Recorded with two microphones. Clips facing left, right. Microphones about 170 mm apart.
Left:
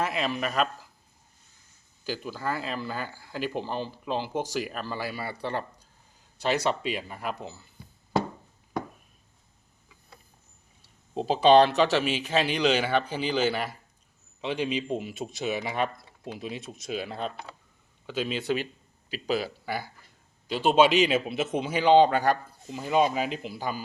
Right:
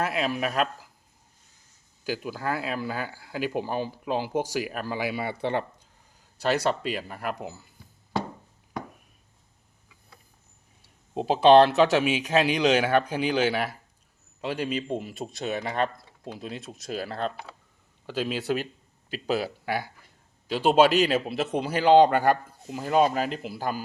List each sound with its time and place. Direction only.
0.0 s speech: 5° right (ahead or behind)
2.0 s speech: 10° right (ahead or behind)
6.5 s speech: centre (ahead or behind)
11.1 s speech: 5° right (ahead or behind)
19.1 s speech: 45° right (ahead or behind)
20.5 s speech: 5° right (ahead or behind)